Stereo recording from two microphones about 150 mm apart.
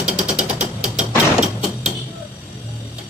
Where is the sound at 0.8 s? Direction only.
5° right (ahead or behind).